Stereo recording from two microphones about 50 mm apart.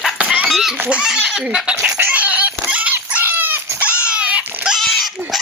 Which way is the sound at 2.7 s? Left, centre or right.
Right.